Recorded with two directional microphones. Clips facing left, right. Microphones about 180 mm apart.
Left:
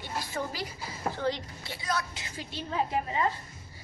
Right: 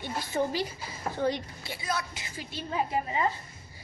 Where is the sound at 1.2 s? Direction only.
15° right (ahead or behind).